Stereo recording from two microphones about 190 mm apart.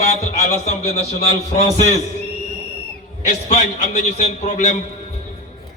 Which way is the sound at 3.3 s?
40° left (ahead or behind).